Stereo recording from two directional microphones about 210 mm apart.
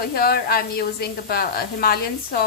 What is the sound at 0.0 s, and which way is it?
A woman's voice, 45° left (ahead or behind).